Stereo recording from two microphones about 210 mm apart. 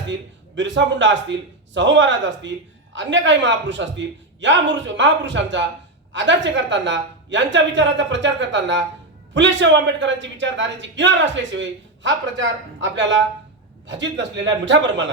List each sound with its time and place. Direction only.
0.1 s speech: 60° right (ahead or behind)